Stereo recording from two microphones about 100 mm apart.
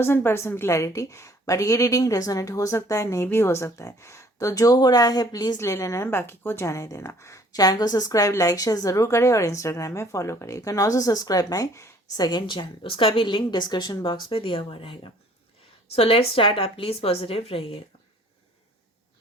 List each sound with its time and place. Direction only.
0.0 s speech: 20° left (ahead or behind); by 5.5 s 40° left (ahead or behind)
5.5 s speech: 25° left (ahead or behind)
12.2 s a woman's voice: 50° left (ahead or behind)
16.0 s a woman's voice: 65° left (ahead or behind)